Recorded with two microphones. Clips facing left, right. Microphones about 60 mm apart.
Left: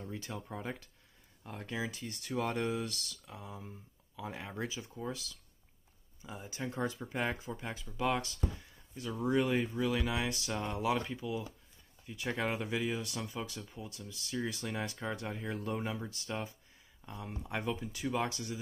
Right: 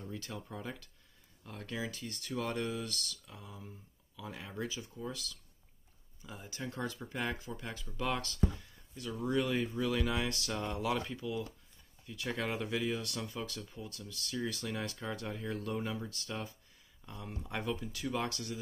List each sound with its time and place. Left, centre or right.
0.0 s speech: centre
8.9 s speech: left
9.9 s speech: centre